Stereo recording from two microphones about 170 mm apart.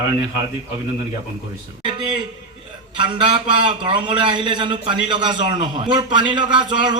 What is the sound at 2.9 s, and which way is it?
A man's voice, 30° right (ahead or behind).